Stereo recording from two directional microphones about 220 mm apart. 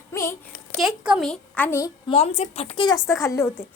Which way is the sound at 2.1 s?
30° left (ahead or behind).